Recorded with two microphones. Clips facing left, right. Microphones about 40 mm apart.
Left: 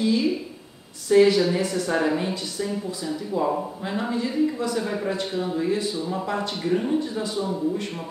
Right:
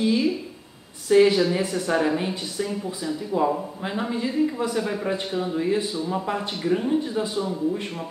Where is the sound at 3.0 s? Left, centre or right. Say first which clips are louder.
Right 2 dB; centre.